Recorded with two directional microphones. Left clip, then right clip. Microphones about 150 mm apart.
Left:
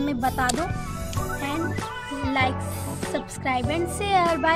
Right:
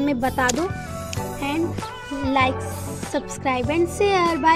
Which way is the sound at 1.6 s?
Centre (ahead or behind).